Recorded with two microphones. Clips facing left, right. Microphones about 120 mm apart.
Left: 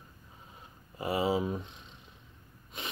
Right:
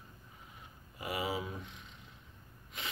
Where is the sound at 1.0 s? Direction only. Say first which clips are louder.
Left 7 dB; 30° left (ahead or behind).